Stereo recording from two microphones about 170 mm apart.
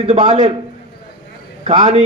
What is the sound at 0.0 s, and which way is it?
Speech, 35° right (ahead or behind).